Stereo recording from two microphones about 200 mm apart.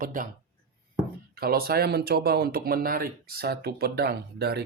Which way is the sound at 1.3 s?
50° right (ahead or behind).